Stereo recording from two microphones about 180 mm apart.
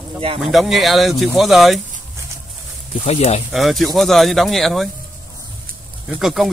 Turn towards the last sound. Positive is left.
turn(degrees=0)  # may be behind; listen again after turning